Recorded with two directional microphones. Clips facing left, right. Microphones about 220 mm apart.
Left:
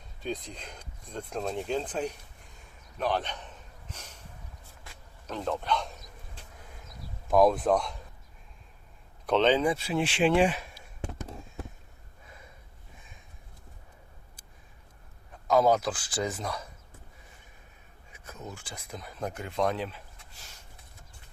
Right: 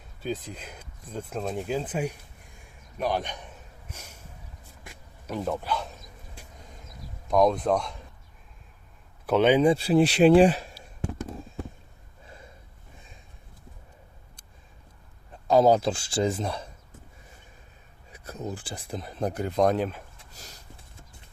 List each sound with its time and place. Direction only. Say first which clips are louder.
0.2 s speech: right 3 dB; 5° right (ahead or behind)
4.8 s a sound: right 3 dB; 15° right (ahead or behind)
7.3 s speech: even; 5° left (ahead or behind)
9.2 s speech: right 3 dB; 10° right (ahead or behind)
9.6 s speech: right 8 dB; 35° right (ahead or behind)
11.0 s a sound: right 5 dB; 5° right (ahead or behind)
15.4 s speech: right 4 dB; 30° right (ahead or behind)
18.1 s speech: right 8 dB; 35° right (ahead or behind)